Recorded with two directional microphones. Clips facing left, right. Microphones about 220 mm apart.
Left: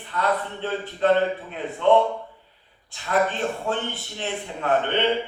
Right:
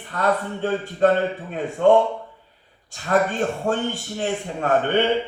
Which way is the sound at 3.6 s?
45° right (ahead or behind).